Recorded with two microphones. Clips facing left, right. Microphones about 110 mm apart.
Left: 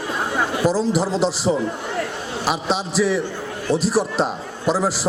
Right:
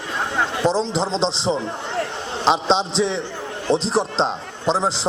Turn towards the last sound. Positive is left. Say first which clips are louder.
# even
turn(degrees=-25)  # may be behind; listen again after turning